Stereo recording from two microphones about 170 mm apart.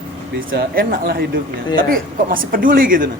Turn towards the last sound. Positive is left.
turn(degrees=-55)  # may be behind; listen again after turning